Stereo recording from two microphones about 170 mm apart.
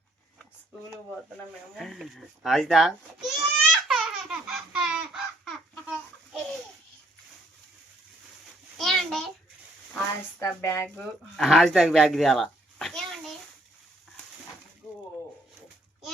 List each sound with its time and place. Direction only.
1.7 s goat: centre (ahead or behind)
8.8 s a sound: centre (ahead or behind)
10.4 s speech: 15° left (ahead or behind)
10.8 s speech: 5° left (ahead or behind)